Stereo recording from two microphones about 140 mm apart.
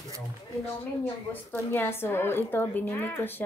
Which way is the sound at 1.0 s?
15° left (ahead or behind).